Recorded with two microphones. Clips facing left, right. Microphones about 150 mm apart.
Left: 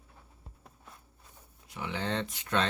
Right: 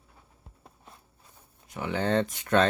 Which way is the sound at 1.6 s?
50° right (ahead or behind).